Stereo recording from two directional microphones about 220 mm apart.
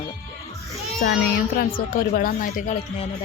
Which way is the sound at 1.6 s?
40° left (ahead or behind).